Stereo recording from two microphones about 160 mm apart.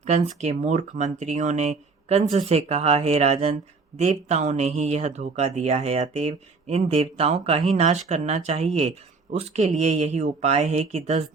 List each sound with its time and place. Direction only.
0.0 s speech: 45° right (ahead or behind)